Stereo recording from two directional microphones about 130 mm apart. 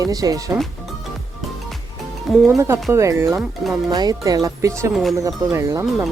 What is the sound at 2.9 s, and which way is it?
Speech, 20° right (ahead or behind).